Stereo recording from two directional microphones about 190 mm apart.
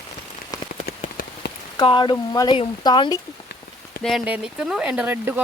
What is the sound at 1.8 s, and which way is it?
Speech, 25° left (ahead or behind).